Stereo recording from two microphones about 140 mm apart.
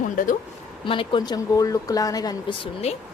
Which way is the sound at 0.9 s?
35° left (ahead or behind).